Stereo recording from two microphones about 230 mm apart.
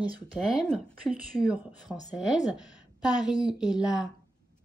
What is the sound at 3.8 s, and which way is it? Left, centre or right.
Speech, centre.